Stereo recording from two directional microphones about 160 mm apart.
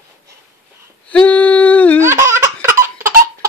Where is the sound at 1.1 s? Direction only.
10° left (ahead or behind).